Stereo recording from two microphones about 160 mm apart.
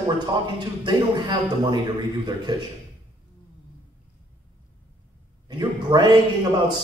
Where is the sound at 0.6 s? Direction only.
25° right (ahead or behind).